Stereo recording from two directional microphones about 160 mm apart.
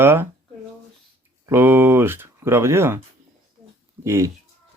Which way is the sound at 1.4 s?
15° right (ahead or behind).